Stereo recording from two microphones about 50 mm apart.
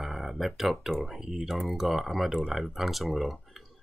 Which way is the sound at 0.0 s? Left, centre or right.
Centre.